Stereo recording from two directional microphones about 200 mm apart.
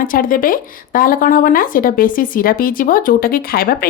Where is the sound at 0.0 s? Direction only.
45° left (ahead or behind).